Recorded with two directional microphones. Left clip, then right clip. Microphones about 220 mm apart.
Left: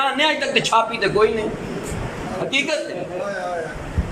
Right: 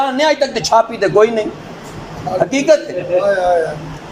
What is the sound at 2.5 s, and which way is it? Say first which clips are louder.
Speech: right 4 dB; 25° right (ahead or behind).